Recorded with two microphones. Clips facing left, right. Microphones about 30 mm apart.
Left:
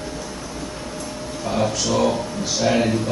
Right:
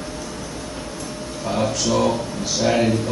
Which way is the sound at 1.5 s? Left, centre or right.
Centre.